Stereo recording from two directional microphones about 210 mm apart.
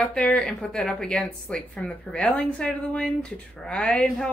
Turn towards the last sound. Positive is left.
turn(degrees=5)  # may be behind; listen again after turning